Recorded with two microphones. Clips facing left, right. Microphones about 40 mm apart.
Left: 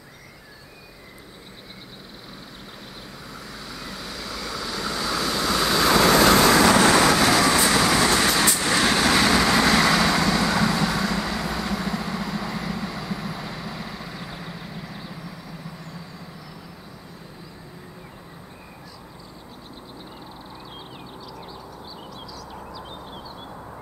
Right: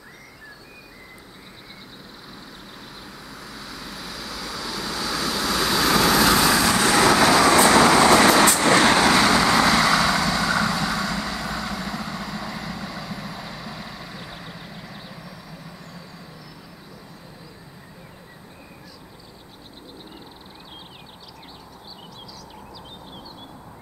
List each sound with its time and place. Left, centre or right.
3.3 s vehicle: centre
7.7 s train: centre
8.1 s vehicle: right
8.9 s vehicle: centre